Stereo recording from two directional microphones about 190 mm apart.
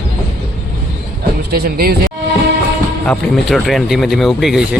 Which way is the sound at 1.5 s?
55° right (ahead or behind).